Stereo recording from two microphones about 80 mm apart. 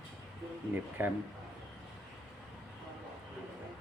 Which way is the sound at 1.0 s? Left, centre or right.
Right.